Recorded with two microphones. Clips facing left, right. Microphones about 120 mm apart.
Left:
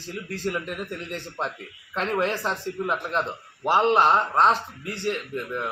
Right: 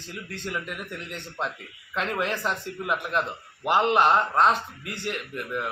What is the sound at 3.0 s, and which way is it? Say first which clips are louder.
Speech: even; 30° left (ahead or behind).